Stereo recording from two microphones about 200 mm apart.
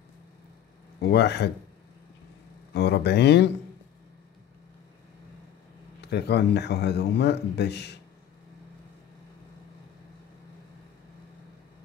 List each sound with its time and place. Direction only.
1.1 s a man's voice: 55° left (ahead or behind)
2.7 s a man's voice: 60° left (ahead or behind)
5.9 s a man's voice: 55° left (ahead or behind)